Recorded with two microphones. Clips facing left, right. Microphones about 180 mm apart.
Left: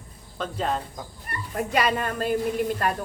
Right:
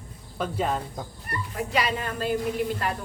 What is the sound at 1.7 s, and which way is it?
Speech, 50° left (ahead or behind).